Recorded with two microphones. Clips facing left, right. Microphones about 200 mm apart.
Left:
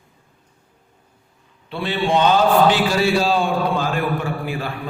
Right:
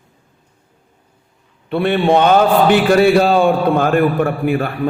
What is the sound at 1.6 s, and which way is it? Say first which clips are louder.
Mantra: right 8 dB; 55° right (ahead or behind).